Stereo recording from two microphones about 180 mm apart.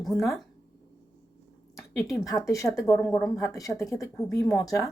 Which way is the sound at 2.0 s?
15° left (ahead or behind).